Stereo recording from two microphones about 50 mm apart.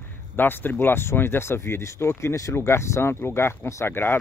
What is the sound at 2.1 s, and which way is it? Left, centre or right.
Speech, left.